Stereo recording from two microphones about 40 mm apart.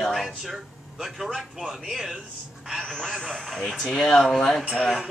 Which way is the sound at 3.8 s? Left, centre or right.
Centre.